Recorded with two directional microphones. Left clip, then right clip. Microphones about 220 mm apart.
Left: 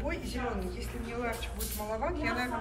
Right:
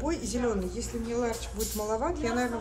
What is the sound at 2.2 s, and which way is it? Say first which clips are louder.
Speech: right 3 dB; 10° right (ahead or behind).